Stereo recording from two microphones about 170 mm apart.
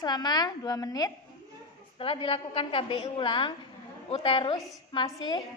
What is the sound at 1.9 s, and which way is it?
A woman's voice, 30° left (ahead or behind).